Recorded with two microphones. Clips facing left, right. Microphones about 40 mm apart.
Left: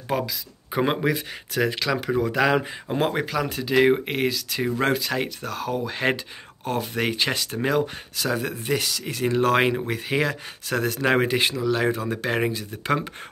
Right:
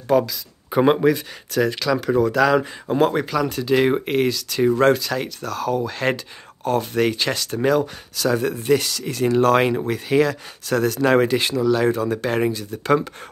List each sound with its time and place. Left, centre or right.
0.1 s speech: centre
0.7 s speech: centre
8.4 s speech: centre